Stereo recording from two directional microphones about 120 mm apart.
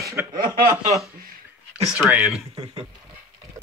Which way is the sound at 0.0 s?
25° right (ahead or behind).